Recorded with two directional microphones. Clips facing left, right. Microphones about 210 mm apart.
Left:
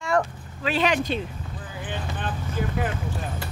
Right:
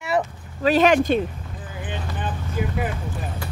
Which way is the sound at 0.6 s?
40° right (ahead or behind).